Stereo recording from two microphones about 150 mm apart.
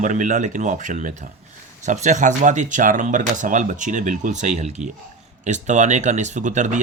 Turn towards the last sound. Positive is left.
turn(degrees=-55)  # may be behind; listen again after turning